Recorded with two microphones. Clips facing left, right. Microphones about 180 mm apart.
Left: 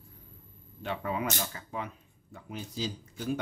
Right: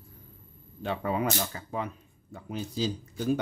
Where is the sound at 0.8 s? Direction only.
35° right (ahead or behind).